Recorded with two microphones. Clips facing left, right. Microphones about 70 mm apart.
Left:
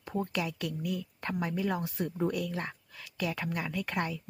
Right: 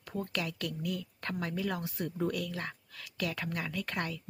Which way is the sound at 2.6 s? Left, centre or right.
Centre.